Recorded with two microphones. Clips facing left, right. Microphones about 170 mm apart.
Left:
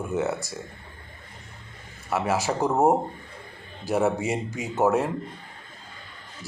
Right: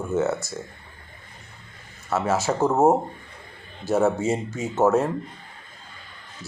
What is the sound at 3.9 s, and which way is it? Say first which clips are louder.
Speech: right 3 dB; 15° left (ahead or behind).